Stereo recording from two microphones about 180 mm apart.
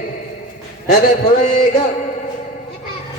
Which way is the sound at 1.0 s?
40° left (ahead or behind).